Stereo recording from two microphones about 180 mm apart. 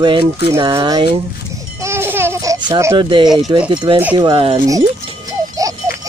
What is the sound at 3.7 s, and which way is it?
Speech, 25° right (ahead or behind).